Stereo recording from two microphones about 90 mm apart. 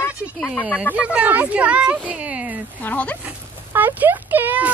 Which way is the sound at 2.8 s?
15° left (ahead or behind).